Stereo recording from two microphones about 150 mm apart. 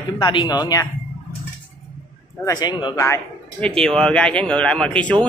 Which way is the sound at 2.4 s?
25° left (ahead or behind).